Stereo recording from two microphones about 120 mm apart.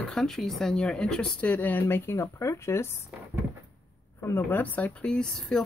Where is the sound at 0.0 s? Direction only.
5° left (ahead or behind); by 3.0 s 20° left (ahead or behind).